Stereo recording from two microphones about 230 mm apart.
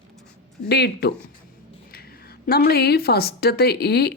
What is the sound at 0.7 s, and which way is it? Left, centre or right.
Speech, left.